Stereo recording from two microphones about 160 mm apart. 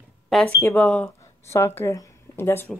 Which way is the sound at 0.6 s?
10° left (ahead or behind).